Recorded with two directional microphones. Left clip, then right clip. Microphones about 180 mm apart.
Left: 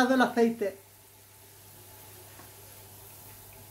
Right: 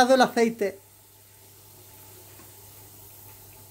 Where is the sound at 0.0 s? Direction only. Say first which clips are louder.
Right 5 dB; 45° right (ahead or behind).